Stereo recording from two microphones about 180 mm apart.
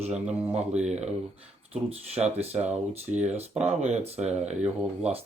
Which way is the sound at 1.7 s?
35° right (ahead or behind).